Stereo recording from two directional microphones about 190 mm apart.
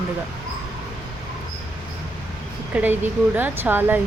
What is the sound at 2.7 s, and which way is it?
Speech, 10° right (ahead or behind).